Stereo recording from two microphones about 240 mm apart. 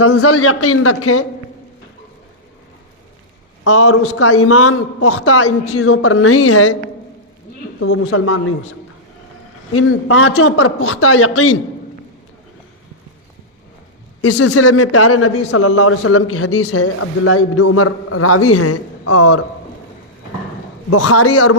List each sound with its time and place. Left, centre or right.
0.0 s a man's voice: left
3.6 s a man's voice: left
7.8 s a man's voice: left
9.7 s a man's voice: left
14.2 s a man's voice: left
20.9 s a man's voice: left